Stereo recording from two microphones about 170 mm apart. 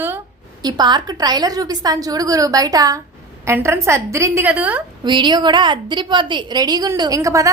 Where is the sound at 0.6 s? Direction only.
25° right (ahead or behind); by 4.8 s 10° right (ahead or behind).